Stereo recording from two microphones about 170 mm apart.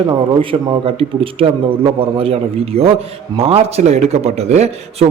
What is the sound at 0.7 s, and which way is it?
A man's voice, 35° right (ahead or behind).